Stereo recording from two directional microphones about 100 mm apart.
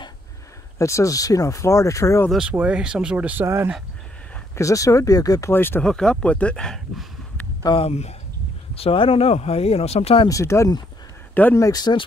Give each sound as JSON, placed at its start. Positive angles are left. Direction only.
{"t": 0.7, "sound": "speech", "side_deg": 30}
{"t": 2.5, "sound": "speech", "side_deg": -10}
{"t": 4.6, "sound": "speech", "side_deg": 30}
{"t": 5.5, "sound": "speech", "side_deg": 20}
{"t": 5.9, "sound": "speech", "side_deg": 10}
{"t": 7.7, "sound": "speech", "side_deg": 85}
{"t": 8.7, "sound": "speech", "side_deg": 70}
{"t": 10.2, "sound": "speech", "side_deg": 30}